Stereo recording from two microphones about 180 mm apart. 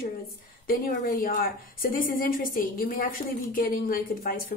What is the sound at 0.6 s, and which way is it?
A woman's voice, 55° left (ahead or behind).